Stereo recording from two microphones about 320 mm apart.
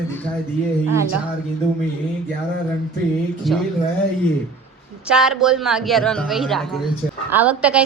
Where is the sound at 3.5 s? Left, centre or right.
Centre.